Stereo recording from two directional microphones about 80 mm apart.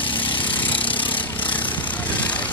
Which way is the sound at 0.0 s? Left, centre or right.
Left.